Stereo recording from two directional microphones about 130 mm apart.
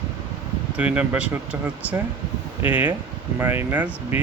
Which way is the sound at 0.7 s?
10° right (ahead or behind).